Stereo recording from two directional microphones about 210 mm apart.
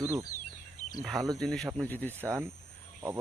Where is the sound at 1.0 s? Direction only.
Centre (ahead or behind).